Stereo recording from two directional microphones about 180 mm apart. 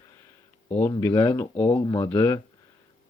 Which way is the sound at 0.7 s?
15° left (ahead or behind).